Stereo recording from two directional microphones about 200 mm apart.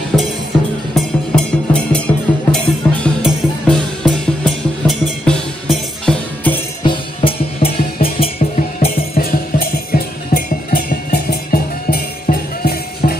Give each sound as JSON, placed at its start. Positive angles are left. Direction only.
{"t": 0.1, "sound": "music", "side_deg": 5}
{"t": 6.8, "sound": "music", "side_deg": 25}
{"t": 8.9, "sound": "music", "side_deg": 50}